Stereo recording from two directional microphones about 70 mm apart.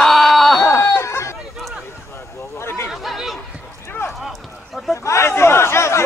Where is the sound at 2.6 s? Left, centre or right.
Left.